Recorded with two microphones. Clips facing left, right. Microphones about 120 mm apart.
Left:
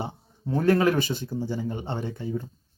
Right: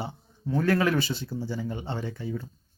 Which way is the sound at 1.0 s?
50° left (ahead or behind).